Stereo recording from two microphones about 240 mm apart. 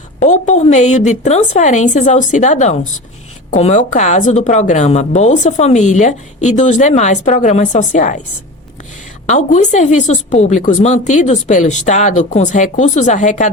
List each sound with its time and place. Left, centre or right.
0.2 s a woman's voice: left
9.2 s a woman's voice: left